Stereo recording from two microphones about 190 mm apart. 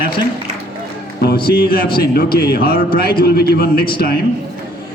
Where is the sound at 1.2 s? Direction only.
55° left (ahead or behind).